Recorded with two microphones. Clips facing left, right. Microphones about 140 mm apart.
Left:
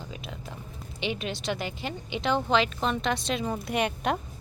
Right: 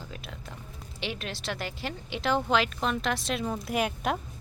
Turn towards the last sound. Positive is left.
turn(degrees=0)  # may be behind; listen again after turning